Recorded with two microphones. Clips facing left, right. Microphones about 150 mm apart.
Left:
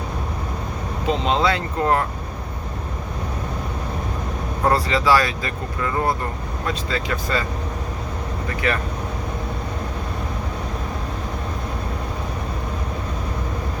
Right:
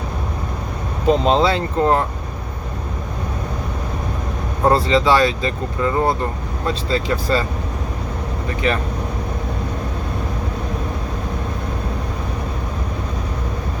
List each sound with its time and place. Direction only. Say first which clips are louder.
1.0 s speech: right 6 dB; 40° right (ahead or behind)
1.4 s speech: right 4 dB; 30° right (ahead or behind)
4.6 s speech: right 4 dB; 25° right (ahead or behind)
8.6 s speech: right 3 dB; 20° right (ahead or behind)